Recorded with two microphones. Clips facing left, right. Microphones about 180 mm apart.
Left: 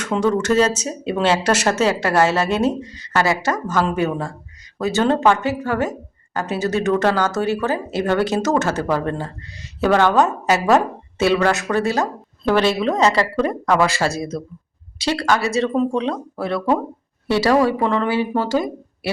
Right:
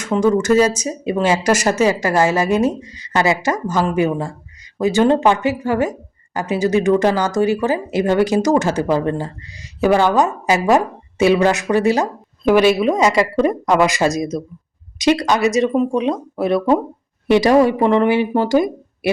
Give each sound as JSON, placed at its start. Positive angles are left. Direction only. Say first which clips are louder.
{"t": 0.0, "sound": "speech", "louder": "right 3 dB", "side_deg": -10}